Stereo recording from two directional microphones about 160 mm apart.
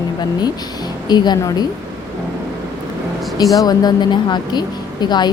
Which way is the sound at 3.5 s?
25° left (ahead or behind).